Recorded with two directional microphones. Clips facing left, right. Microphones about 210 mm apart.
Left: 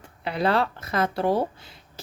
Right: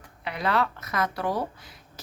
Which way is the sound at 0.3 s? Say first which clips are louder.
Left 3 dB; 30° left (ahead or behind).